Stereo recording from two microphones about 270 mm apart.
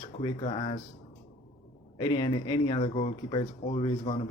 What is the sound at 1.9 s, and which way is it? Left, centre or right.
Speech, centre.